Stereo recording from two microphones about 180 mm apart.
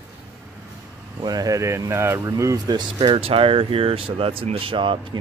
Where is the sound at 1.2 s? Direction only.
20° right (ahead or behind).